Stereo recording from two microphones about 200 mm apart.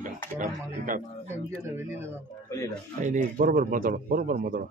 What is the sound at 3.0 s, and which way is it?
Speech, 40° right (ahead or behind).